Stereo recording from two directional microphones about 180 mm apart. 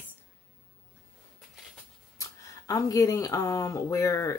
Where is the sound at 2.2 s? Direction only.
20° left (ahead or behind).